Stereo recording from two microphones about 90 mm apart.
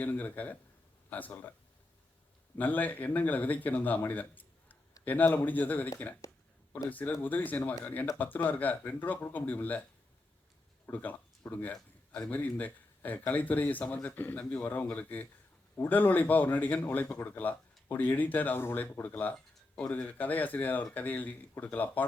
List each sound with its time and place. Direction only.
0.0 s a man's voice: 20° left (ahead or behind)
2.6 s a man's voice: 20° left (ahead or behind)
6.9 s a man's voice: 20° left (ahead or behind)
10.8 s a man's voice: 20° left (ahead or behind)